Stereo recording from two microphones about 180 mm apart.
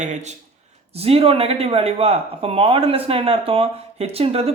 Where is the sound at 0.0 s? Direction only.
40° right (ahead or behind).